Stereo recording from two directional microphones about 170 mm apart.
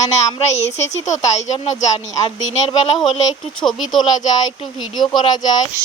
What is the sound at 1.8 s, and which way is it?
Speech, 25° left (ahead or behind).